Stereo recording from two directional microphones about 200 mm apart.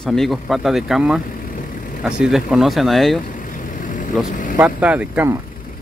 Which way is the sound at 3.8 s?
40° left (ahead or behind).